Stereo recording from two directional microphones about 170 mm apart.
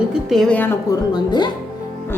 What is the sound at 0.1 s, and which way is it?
Speech, centre (ahead or behind).